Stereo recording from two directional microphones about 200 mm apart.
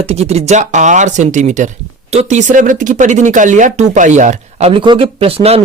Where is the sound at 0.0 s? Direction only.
30° right (ahead or behind).